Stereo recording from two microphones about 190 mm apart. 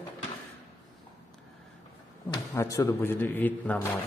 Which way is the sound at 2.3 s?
15° left (ahead or behind).